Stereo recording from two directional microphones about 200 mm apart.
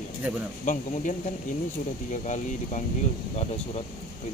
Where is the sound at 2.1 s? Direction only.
35° left (ahead or behind).